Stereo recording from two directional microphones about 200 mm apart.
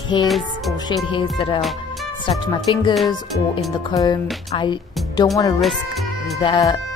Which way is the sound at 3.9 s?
15° left (ahead or behind).